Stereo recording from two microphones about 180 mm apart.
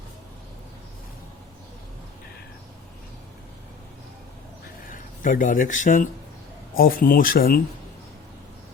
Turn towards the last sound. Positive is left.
turn(degrees=55)  # may be behind; listen again after turning